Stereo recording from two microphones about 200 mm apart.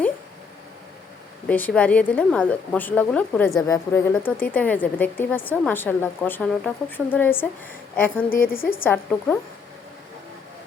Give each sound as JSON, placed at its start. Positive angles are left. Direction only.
{"t": 1.5, "sound": "a woman's voice", "side_deg": 10}
{"t": 8.4, "sound": "a woman's voice", "side_deg": 45}
{"t": 8.8, "sound": "a woman's voice", "side_deg": 10}